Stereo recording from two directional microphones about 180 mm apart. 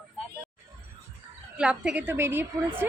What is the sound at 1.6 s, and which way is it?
Speech, 5° right (ahead or behind).